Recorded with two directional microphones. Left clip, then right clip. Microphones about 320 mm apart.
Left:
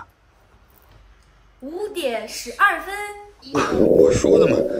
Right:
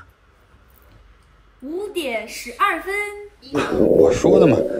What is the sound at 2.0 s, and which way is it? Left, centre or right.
A woman's voice, centre.